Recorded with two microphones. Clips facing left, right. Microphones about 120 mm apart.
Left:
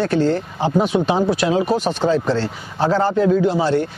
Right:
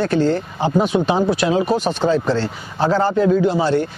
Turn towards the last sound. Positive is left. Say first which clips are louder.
# even
turn(degrees=0)  # may be behind; listen again after turning